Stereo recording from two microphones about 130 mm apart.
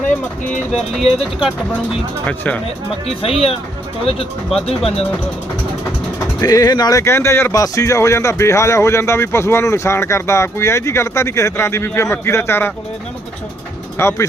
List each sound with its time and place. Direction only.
0.7 s speech: centre (ahead or behind)
2.2 s speech: 10° left (ahead or behind)
3.2 s speech: 45° left (ahead or behind)
6.4 s speech: 30° left (ahead or behind)
14.0 s speech: 20° left (ahead or behind)